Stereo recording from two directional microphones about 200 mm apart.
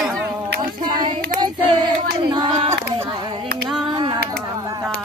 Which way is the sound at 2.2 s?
25° right (ahead or behind).